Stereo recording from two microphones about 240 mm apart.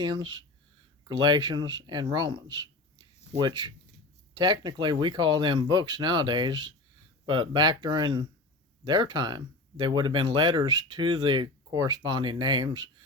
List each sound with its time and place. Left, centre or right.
0.0 s speech: centre